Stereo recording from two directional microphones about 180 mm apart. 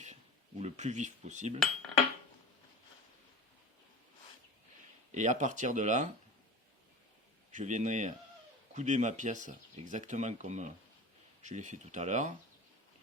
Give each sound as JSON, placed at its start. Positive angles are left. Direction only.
{"t": 0.6, "sound": "speech", "side_deg": -40}
{"t": 5.1, "sound": "speech", "side_deg": -45}
{"t": 7.5, "sound": "speech", "side_deg": -40}